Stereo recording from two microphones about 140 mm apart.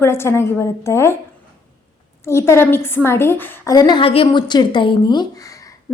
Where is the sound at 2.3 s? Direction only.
20° left (ahead or behind).